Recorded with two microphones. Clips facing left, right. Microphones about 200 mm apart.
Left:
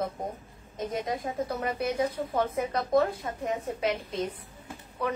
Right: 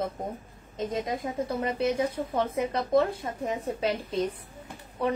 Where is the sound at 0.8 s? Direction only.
25° right (ahead or behind).